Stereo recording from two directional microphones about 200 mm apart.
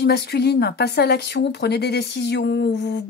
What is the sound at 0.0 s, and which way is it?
Speech, 55° left (ahead or behind).